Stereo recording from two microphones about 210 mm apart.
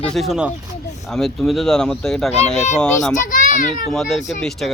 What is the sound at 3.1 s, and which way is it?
Speech, 40° left (ahead or behind).